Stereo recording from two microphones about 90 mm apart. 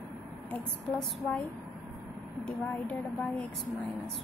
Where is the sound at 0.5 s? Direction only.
15° left (ahead or behind).